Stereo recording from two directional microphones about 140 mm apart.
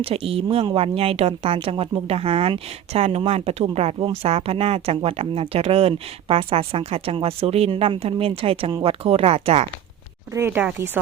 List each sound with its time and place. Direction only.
0.0 s speech: 45° right (ahead or behind)
10.3 s speech: 15° right (ahead or behind)